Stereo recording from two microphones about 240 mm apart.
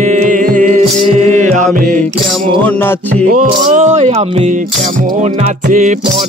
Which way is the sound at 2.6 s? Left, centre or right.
Centre.